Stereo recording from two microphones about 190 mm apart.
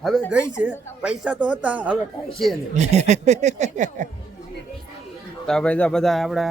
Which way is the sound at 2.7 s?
35° right (ahead or behind).